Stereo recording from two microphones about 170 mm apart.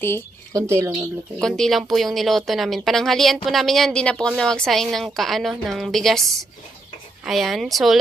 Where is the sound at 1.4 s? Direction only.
Centre (ahead or behind).